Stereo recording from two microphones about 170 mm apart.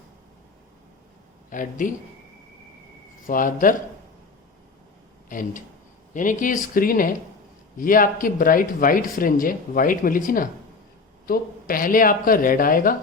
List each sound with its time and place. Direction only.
1.5 s speech: 50° left (ahead or behind)
3.2 s speech: 55° left (ahead or behind)
5.3 s speech: 50° left (ahead or behind)